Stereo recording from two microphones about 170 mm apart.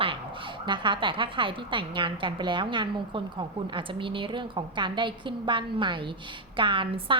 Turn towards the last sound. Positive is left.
turn(degrees=-30)  # may be behind; listen again after turning